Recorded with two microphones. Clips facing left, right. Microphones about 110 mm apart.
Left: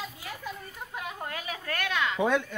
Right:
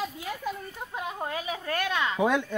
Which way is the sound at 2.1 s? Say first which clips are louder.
Right 1 dB; 10° right (ahead or behind).